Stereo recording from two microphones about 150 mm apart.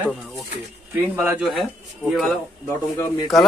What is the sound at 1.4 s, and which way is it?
A man's voice, centre (ahead or behind).